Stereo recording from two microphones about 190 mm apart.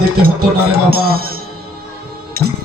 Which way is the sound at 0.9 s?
50° right (ahead or behind).